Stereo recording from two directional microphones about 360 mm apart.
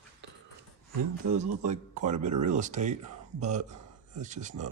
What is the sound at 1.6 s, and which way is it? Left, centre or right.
Speech, centre.